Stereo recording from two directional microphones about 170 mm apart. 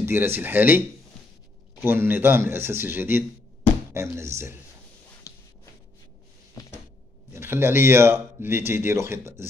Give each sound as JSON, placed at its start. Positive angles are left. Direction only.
{"t": 0.0, "sound": "speech", "side_deg": -15}
{"t": 5.3, "sound": "a sound", "side_deg": 20}
{"t": 6.6, "sound": "cupboard open or close", "side_deg": 20}
{"t": 7.3, "sound": "speech", "side_deg": -15}